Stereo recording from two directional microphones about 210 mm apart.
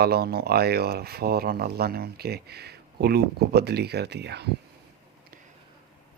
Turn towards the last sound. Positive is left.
turn(degrees=-50)  # may be behind; listen again after turning